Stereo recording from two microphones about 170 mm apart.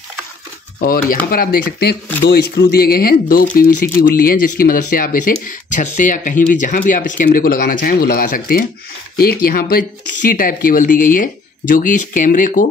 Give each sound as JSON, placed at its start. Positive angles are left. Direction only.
{"t": 0.7, "sound": "speech", "side_deg": 55}
{"t": 2.2, "sound": "speech", "side_deg": 75}